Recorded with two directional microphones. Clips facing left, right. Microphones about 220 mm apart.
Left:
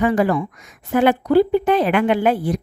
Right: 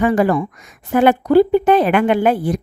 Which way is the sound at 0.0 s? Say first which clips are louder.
Right 2 dB; 50° right (ahead or behind).